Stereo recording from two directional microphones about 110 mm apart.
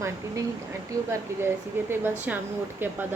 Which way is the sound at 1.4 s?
20° right (ahead or behind).